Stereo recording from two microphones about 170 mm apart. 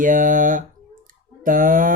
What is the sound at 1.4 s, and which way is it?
Mantra, 50° right (ahead or behind).